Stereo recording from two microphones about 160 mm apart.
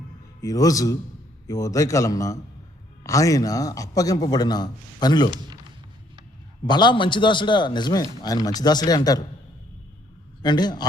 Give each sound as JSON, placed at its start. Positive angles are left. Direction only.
{"t": 0.4, "sound": "speech", "side_deg": 20}
{"t": 6.7, "sound": "speech", "side_deg": 30}
{"t": 10.4, "sound": "speech", "side_deg": 25}